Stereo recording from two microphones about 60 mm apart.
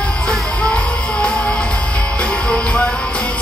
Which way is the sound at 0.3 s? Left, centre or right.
Centre.